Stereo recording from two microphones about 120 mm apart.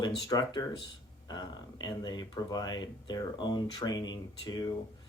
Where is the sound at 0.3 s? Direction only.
35° left (ahead or behind).